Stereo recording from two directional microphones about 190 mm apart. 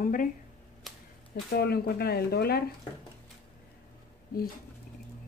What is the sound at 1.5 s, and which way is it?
Speech, 55° left (ahead or behind).